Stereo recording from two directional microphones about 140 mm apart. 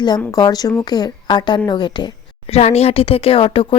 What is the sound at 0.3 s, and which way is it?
Speech, 25° left (ahead or behind).